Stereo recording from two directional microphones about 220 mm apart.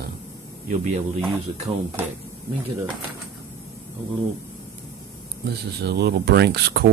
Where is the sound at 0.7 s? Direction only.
35° right (ahead or behind).